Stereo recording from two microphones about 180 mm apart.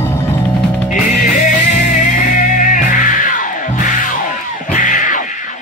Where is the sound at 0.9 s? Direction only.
45° left (ahead or behind).